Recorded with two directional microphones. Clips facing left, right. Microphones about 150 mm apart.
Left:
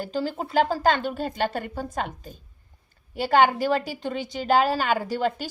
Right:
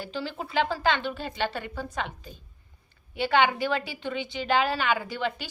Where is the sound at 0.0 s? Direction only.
40° left (ahead or behind).